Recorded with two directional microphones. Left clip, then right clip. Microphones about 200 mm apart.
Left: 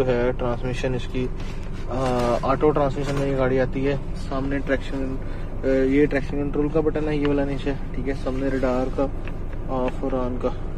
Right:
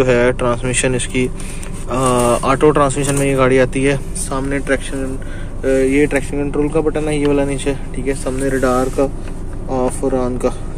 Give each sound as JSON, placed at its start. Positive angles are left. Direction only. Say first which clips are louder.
{"t": 0.0, "sound": "speech", "louder": "right 9 dB", "side_deg": -20}
{"t": 4.3, "sound": "speech", "louder": "right 7 dB", "side_deg": -15}
{"t": 5.7, "sound": "speech", "louder": "right 6 dB", "side_deg": 0}